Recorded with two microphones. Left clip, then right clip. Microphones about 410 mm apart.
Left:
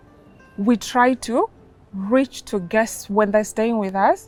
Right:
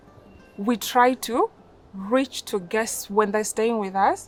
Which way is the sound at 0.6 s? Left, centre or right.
Left.